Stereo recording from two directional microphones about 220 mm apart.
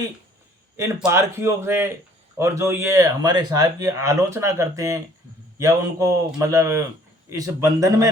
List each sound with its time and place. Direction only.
1.0 s speech: 10° right (ahead or behind)